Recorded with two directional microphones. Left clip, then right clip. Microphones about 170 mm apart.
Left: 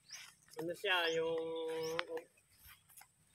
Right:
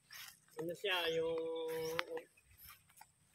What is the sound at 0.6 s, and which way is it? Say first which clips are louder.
Speech: left 3 dB; 30° left (ahead or behind).